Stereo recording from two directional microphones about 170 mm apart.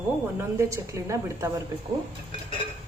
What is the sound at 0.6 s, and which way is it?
Speech, 15° right (ahead or behind).